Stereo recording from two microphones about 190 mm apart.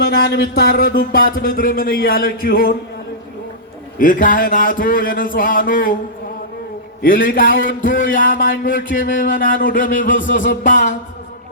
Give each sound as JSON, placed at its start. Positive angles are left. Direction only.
{"t": 0.0, "sound": "speech", "side_deg": 55}
{"t": 3.9, "sound": "speech", "side_deg": 45}
{"t": 7.0, "sound": "speech", "side_deg": 50}